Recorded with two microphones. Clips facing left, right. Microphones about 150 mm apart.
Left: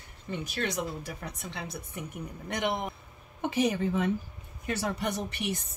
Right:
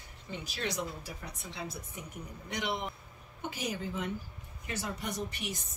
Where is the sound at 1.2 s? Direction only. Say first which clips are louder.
Left 5 dB; 65° left (ahead or behind).